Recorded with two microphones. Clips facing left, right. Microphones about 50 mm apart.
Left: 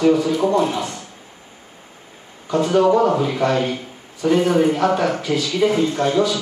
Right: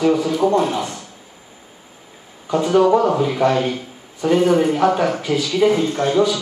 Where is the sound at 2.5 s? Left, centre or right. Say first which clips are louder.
Right 1 dB; centre.